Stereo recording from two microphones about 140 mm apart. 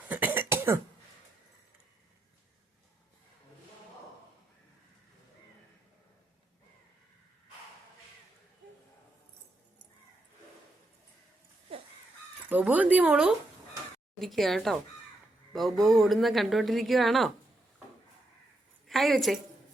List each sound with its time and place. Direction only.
0.1 s cough: 10° right (ahead or behind)
12.5 s speech: 10° right (ahead or behind)
14.2 s speech: centre (ahead or behind)
18.9 s speech: centre (ahead or behind)